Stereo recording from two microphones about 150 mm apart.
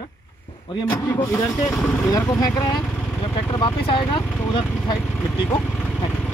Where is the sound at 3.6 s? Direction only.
35° left (ahead or behind).